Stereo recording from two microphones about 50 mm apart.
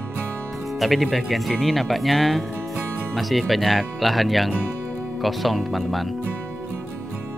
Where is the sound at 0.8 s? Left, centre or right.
Centre.